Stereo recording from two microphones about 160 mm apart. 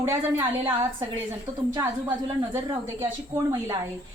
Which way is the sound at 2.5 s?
15° right (ahead or behind).